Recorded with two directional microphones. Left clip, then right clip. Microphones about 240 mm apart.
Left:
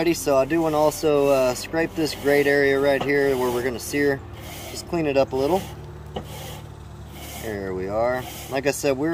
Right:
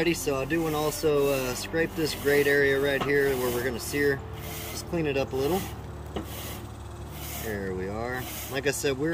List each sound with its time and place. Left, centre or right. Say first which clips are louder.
0.0 s speech: left 7 dB; centre
7.5 s speech: left 8 dB; centre